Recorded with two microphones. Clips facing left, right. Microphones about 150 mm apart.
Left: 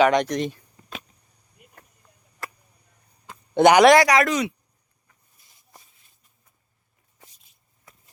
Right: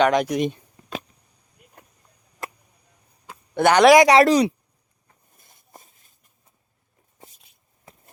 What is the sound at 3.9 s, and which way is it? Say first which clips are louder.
Speech: right 5 dB; 25° right (ahead or behind).